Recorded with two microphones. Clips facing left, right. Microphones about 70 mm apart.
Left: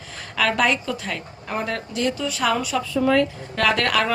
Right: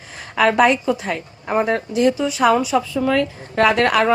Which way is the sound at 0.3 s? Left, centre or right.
Right.